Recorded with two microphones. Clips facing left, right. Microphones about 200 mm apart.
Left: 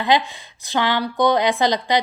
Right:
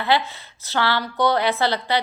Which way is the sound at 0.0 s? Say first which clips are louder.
Left 2 dB; 15° left (ahead or behind).